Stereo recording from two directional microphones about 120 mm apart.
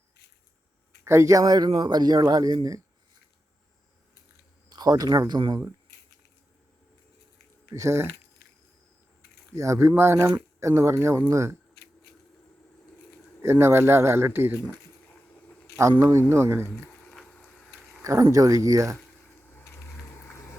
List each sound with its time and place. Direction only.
1.0 s speech: 25° right (ahead or behind)
4.7 s speech: 35° right (ahead or behind)
7.7 s speech: 25° right (ahead or behind)
9.5 s speech: 25° right (ahead or behind)
13.4 s speech: 20° right (ahead or behind)
15.1 s a sound: 15° left (ahead or behind)
15.8 s speech: 25° right (ahead or behind)
16.6 s a sound: 15° left (ahead or behind)
18.0 s speech: 25° right (ahead or behind)
19.5 s a sound: 20° left (ahead or behind)